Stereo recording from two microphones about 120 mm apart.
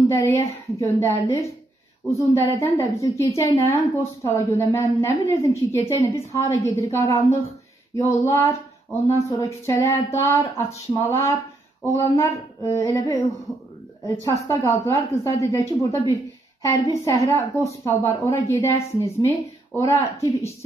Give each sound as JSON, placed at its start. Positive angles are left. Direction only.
{"t": 0.1, "sound": "a woman's voice", "side_deg": 25}
{"t": 14.2, "sound": "a woman's voice", "side_deg": 25}